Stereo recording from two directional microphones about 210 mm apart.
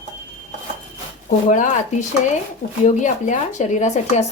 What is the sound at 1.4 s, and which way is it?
Speech, 35° left (ahead or behind).